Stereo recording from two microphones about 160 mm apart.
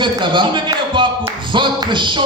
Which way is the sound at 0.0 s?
30° right (ahead or behind).